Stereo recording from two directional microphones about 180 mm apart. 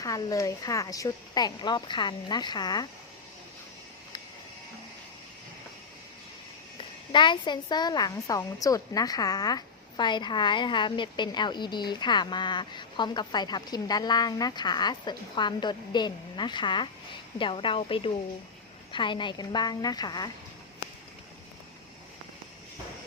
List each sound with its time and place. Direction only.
0.0 s a woman's voice: 20° left (ahead or behind)
7.1 s a woman's voice: 25° left (ahead or behind)